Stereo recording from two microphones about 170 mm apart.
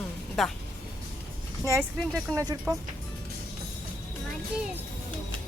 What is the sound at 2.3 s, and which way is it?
Speech, 20° right (ahead or behind).